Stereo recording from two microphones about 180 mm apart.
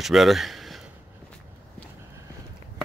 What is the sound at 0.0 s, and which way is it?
Speech, centre (ahead or behind).